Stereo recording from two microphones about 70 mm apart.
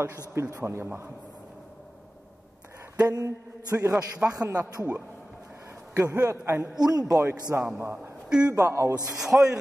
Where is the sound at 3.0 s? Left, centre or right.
Right.